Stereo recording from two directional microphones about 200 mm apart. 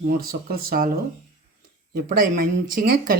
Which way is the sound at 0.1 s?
50° right (ahead or behind).